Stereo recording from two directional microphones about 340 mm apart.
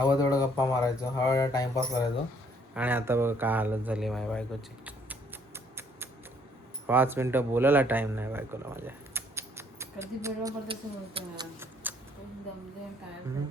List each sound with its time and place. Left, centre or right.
0.0 s speech: centre
2.7 s speech: centre
5.5 s a sound: centre
6.8 s speech: centre